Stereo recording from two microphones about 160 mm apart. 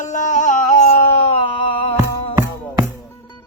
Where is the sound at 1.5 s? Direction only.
30° left (ahead or behind).